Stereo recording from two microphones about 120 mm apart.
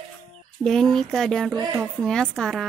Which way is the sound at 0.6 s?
Centre (ahead or behind).